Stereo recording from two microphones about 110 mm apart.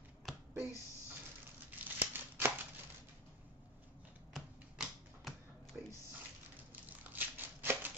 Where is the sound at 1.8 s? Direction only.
20° right (ahead or behind).